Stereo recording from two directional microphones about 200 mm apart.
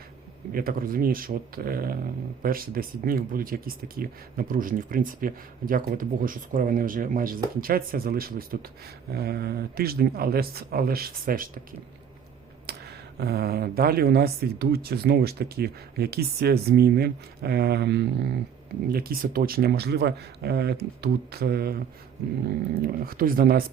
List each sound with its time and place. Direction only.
0.5 s speech: 45° right (ahead or behind)
12.7 s a sound: 55° right (ahead or behind)
13.1 s speech: 50° right (ahead or behind)